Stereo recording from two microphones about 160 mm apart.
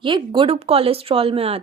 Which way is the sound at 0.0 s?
30° right (ahead or behind).